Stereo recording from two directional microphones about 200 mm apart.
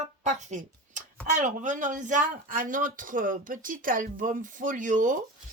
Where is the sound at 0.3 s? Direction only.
40° right (ahead or behind).